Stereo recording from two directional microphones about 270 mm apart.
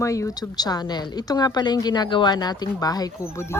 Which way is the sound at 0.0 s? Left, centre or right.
Centre.